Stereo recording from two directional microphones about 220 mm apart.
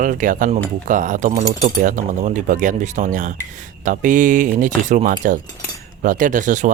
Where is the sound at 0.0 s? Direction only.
35° right (ahead or behind).